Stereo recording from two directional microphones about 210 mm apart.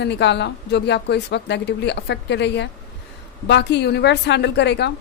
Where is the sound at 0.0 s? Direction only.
55° left (ahead or behind).